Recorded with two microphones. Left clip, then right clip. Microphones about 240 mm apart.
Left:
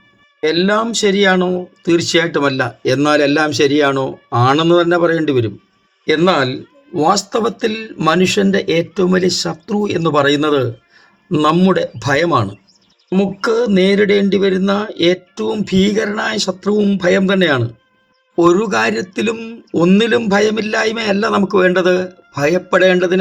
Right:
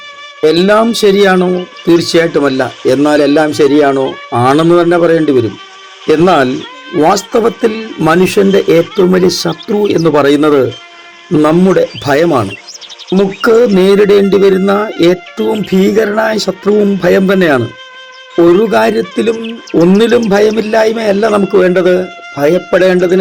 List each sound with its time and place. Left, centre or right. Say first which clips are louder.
0.4 s speech: right 7 dB; centre
18.7 s speech: right 6 dB; centre